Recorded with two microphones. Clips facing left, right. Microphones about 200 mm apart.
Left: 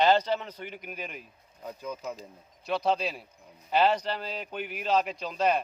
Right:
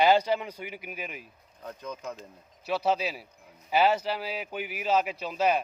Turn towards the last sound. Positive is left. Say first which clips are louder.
# right 1 dB
turn(degrees=-5)  # may be behind; listen again after turning